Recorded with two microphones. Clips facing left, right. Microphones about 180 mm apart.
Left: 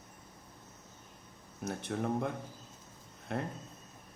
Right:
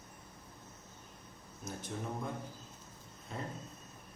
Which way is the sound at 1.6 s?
65° left (ahead or behind).